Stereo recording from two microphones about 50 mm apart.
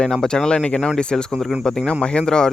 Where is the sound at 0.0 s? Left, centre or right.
Centre.